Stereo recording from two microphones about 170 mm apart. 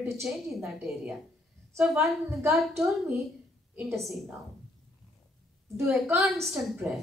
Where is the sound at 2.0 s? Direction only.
15° right (ahead or behind).